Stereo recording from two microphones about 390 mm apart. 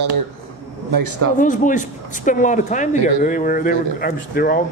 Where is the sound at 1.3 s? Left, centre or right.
Centre.